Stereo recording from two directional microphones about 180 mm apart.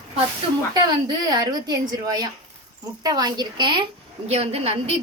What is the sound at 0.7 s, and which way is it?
A woman's voice, 25° right (ahead or behind).